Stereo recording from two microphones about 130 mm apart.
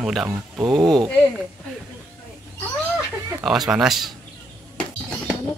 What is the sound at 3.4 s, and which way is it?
Speech, 5° right (ahead or behind).